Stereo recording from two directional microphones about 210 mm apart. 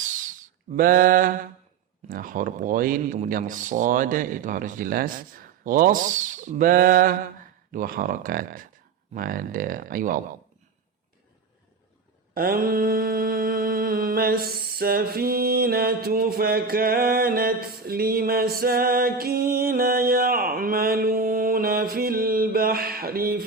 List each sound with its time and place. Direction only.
0.7 s speech: 40° right (ahead or behind)
12.3 s mantra: 45° right (ahead or behind)